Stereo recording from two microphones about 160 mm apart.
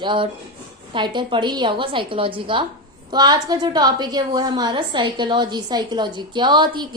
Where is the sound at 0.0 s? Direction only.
30° right (ahead or behind).